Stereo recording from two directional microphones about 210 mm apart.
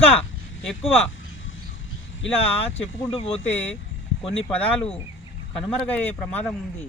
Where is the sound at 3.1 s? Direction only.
25° left (ahead or behind).